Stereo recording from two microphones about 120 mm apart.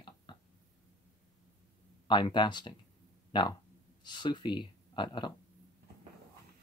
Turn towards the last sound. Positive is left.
turn(degrees=40)  # may be behind; listen again after turning